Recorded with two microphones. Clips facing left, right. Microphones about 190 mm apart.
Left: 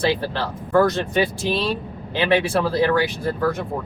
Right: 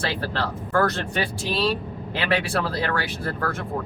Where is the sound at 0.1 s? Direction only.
20° left (ahead or behind).